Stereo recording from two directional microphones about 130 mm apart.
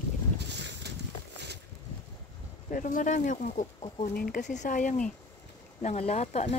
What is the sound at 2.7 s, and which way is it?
Speech, 85° left.